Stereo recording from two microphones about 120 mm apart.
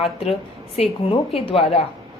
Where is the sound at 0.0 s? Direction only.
55° left (ahead or behind).